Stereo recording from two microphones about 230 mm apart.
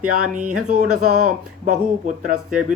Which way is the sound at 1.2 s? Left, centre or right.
Right.